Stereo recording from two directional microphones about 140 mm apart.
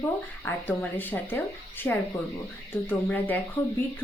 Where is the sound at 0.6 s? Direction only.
15° left (ahead or behind).